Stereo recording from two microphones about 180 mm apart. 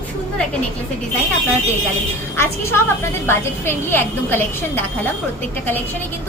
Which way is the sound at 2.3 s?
15° left (ahead or behind).